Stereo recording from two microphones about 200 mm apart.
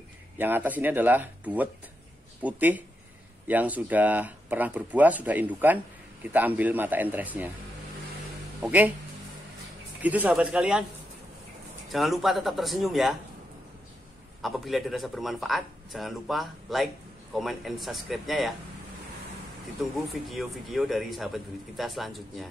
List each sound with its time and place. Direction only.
0.4 s speech: 10° right (ahead or behind)
8.5 s speech: 10° right (ahead or behind)
10.0 s speech: 10° right (ahead or behind)
11.9 s speech: centre (ahead or behind)
14.4 s speech: centre (ahead or behind)
19.8 s speech: centre (ahead or behind)